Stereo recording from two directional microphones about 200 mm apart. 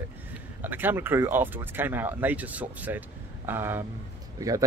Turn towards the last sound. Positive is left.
turn(degrees=-15)  # may be behind; listen again after turning